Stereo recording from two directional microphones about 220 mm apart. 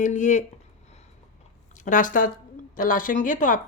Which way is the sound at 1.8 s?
35° left (ahead or behind).